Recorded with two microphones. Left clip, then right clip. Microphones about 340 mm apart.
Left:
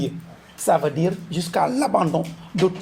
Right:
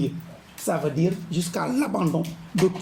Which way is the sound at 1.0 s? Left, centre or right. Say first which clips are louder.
Left 2 dB; centre.